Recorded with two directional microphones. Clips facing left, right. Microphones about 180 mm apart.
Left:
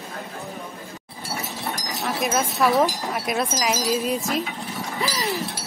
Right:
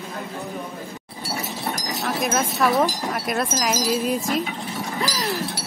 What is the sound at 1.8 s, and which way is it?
Speech, centre (ahead or behind).